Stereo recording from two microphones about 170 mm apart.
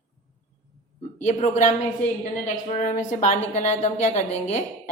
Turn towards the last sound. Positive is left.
turn(degrees=40)  # may be behind; listen again after turning